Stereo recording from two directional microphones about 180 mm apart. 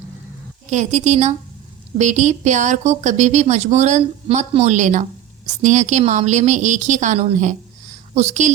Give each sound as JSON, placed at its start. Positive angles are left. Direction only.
{"t": 0.7, "sound": "speech", "side_deg": -40}